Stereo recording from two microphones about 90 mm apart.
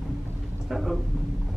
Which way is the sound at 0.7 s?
Centre (ahead or behind).